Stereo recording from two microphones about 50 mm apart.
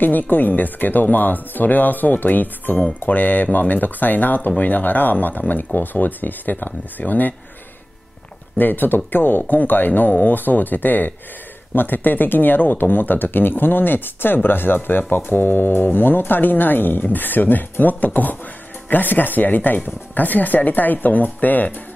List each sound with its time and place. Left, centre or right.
0.0 s speech: left
8.5 s speech: left